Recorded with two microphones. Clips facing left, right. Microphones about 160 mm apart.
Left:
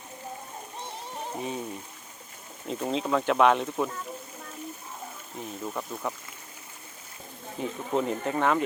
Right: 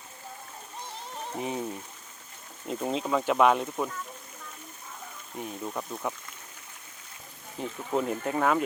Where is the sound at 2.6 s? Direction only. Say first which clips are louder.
Left 1 dB; 5° right (ahead or behind).